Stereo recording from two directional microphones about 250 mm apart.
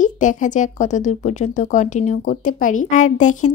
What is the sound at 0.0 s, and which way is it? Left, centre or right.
Speech, left.